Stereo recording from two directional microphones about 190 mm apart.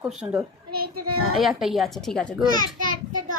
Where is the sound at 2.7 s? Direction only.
45° right (ahead or behind).